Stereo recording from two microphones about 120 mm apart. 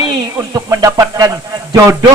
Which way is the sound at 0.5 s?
30° right (ahead or behind).